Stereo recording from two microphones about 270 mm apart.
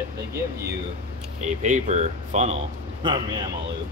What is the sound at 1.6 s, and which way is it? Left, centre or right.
Speech, right.